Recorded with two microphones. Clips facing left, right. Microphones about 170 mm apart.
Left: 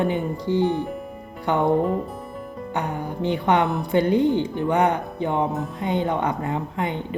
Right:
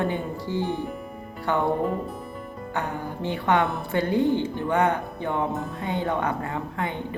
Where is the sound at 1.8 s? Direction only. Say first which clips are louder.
Left 3 dB; centre (ahead or behind).